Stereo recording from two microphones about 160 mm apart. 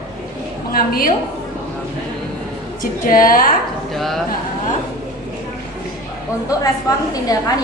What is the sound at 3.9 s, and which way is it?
Speech, centre (ahead or behind).